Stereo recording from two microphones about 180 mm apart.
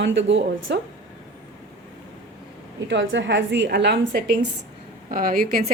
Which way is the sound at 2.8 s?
90° right.